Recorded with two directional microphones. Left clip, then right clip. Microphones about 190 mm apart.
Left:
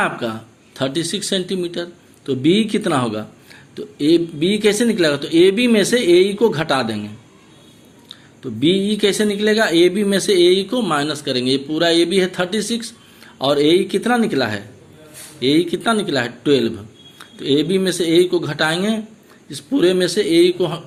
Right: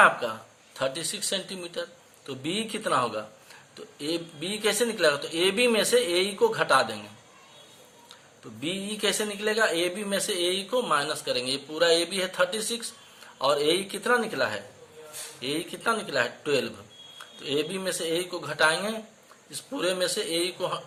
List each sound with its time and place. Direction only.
0.0 s speech: 20° left (ahead or behind)
8.6 s speech: 15° left (ahead or behind)